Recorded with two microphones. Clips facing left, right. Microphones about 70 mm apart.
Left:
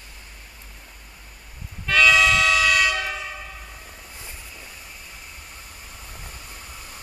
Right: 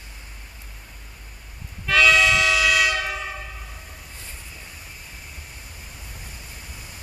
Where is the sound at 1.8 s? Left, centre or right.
Centre.